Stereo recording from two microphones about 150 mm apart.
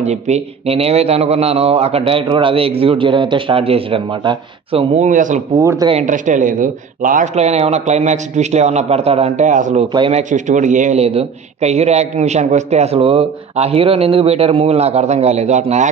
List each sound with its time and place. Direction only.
0.0 s a man's voice: 50° right (ahead or behind); by 4.8 s 35° right (ahead or behind)
4.9 s a man's voice: 55° right (ahead or behind)
5.6 s speech: 20° right (ahead or behind)
6.0 s a man's voice: 60° right (ahead or behind)